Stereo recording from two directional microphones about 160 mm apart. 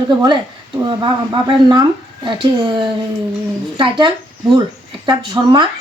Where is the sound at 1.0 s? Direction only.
30° right (ahead or behind).